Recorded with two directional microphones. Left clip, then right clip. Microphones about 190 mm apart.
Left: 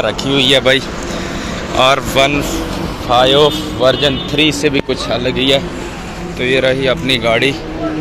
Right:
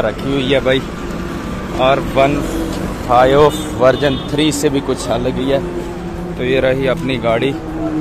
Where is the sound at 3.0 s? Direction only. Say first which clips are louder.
Even; 15° right (ahead or behind).